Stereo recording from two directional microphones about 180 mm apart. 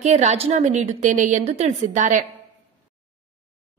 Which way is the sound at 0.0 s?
40° right (ahead or behind).